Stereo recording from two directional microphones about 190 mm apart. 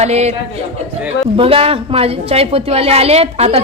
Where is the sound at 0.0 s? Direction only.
35° right (ahead or behind).